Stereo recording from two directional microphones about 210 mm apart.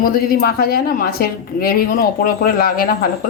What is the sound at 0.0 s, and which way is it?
A woman's voice, 45° left (ahead or behind).